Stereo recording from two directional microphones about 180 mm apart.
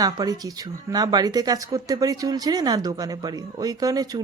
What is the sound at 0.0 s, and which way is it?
Speech, 20° right (ahead or behind).